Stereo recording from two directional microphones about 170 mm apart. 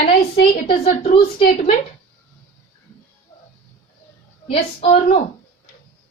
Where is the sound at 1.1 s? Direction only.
30° left (ahead or behind).